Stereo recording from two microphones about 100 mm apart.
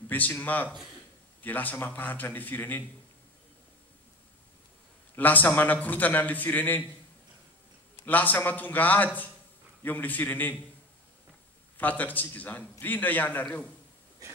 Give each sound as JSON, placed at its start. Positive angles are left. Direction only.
{"t": 0.1, "sound": "a man's voice", "side_deg": 20}
{"t": 5.1, "sound": "a man's voice", "side_deg": 15}
{"t": 8.0, "sound": "a man's voice", "side_deg": 15}
{"t": 11.7, "sound": "a man's voice", "side_deg": 15}